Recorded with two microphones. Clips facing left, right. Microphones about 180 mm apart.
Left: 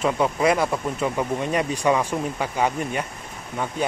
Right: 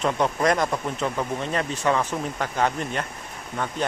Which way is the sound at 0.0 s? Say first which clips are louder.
Left 2 dB; 10° left (ahead or behind).